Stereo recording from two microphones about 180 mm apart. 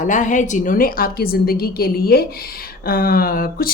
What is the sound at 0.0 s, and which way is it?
A woman's voice, 45° left (ahead or behind).